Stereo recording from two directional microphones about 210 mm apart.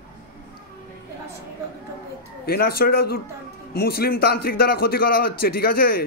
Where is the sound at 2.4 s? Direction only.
45° left (ahead or behind).